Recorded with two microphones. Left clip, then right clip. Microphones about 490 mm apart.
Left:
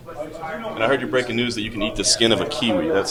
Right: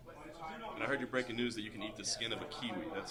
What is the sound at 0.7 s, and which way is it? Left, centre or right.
A man's voice, left.